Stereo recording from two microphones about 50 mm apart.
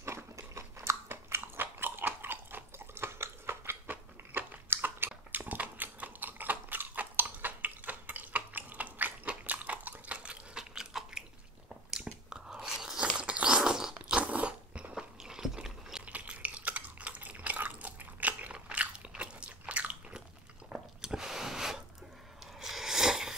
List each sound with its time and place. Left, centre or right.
0.0 s crunch: right
1.0 s biting: right
4.3 s biting: right
9.3 s a sound: right
10.7 s biting: centre
13.1 s biting: right
15.2 s biting: centre
16.1 s drip: right
18.5 s biting: right
20.7 s a sound: centre